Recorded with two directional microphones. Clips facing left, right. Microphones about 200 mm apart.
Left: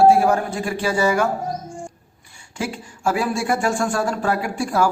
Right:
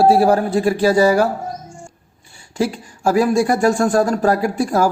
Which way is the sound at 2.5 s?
35° right (ahead or behind).